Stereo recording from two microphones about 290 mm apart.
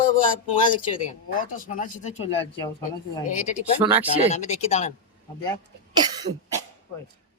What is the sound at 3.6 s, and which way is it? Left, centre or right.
Speech, centre.